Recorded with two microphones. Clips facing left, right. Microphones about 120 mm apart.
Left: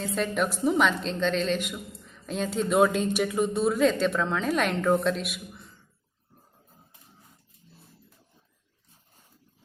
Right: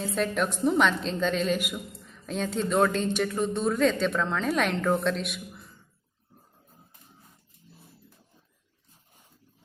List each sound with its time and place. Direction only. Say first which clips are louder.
0.0 s a woman's voice: even; centre (ahead or behind)